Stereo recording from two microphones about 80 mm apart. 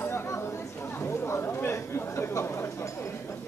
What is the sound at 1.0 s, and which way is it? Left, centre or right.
Chatter, left.